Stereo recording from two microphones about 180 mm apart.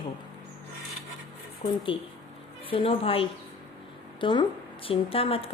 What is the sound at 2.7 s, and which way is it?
A woman's voice, 30° left (ahead or behind).